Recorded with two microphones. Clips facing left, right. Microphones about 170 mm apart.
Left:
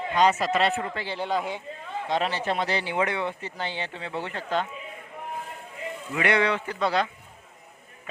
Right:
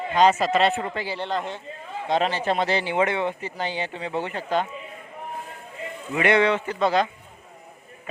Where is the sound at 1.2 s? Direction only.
5° left (ahead or behind).